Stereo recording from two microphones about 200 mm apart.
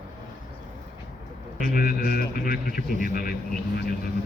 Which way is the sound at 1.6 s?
45° left (ahead or behind).